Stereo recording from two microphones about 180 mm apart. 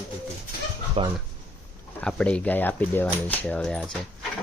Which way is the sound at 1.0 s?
30° right (ahead or behind).